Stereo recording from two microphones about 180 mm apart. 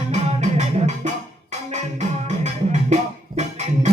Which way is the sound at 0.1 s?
40° right (ahead or behind).